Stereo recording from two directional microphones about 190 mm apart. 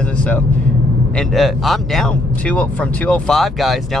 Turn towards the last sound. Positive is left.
turn(degrees=0)  # may be behind; listen again after turning